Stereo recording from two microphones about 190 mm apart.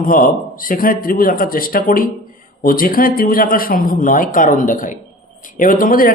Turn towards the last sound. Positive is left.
turn(degrees=45)  # may be behind; listen again after turning